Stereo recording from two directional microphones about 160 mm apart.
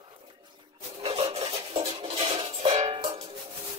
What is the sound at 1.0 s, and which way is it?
Music, 35° right (ahead or behind).